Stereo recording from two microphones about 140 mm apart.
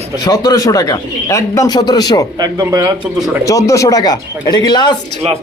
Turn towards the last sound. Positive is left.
turn(degrees=30)  # may be behind; listen again after turning